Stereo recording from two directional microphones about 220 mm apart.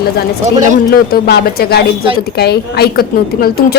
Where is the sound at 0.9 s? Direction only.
45° left (ahead or behind).